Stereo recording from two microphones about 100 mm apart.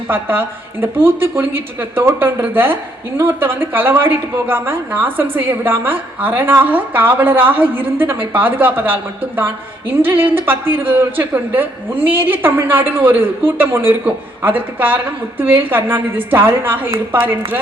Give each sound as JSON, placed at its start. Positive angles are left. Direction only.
{"t": 0.1, "sound": "a woman's voice", "side_deg": -20}